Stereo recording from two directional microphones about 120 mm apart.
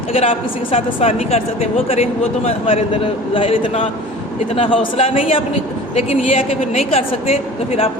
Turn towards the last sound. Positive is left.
turn(degrees=55)  # may be behind; listen again after turning